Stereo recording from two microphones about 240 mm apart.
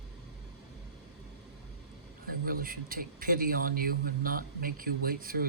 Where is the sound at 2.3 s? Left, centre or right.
Right.